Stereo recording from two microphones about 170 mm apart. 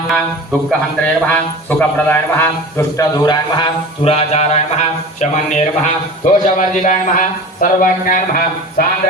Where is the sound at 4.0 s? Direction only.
35° left (ahead or behind).